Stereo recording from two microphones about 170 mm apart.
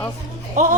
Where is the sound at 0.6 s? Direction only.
45° right (ahead or behind).